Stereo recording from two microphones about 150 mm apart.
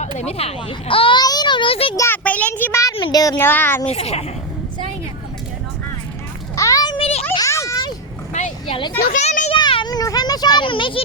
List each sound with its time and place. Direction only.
0.2 s a child's voice: 45° left (ahead or behind)
2.0 s a child's voice: 10° left (ahead or behind)
2.9 s a child's voice: 30° left (ahead or behind)
3.3 s a child's voice: 15° left (ahead or behind)
3.8 s a child's voice: 45° left (ahead or behind)
6.6 s a sound: 20° left (ahead or behind); by 7.3 s 40° left (ahead or behind)
7.3 s a sound: 20° left (ahead or behind)
8.3 s vehicle: 50° left (ahead or behind)
8.6 s a child's voice: 35° left (ahead or behind)
9.1 s a child's voice: 55° left (ahead or behind)
9.5 s a child's voice: 35° left (ahead or behind)